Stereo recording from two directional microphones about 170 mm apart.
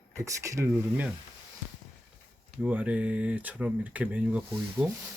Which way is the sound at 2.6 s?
10° right (ahead or behind).